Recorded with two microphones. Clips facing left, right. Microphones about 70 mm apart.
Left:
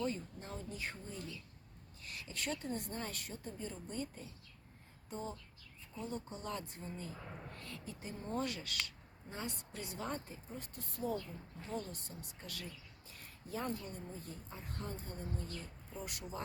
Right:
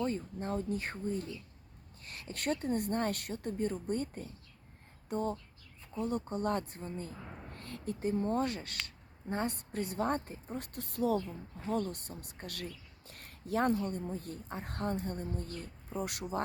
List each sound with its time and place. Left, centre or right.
0.0 s a woman's voice: right
9.3 s a woman's voice: right
11.7 s a woman's voice: right